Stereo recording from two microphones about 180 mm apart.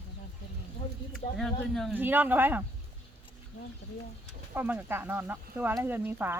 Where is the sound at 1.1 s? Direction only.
5° left (ahead or behind).